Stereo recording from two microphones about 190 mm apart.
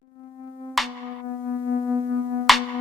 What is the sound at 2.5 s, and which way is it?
Music, centre (ahead or behind).